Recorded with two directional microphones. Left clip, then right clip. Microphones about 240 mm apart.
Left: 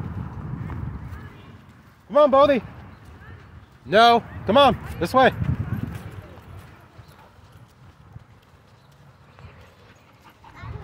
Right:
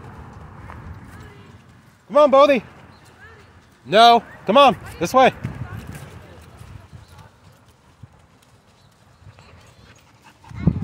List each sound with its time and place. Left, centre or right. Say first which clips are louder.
2.0 s speech: right 3 dB; centre
3.8 s speech: right 3 dB; centre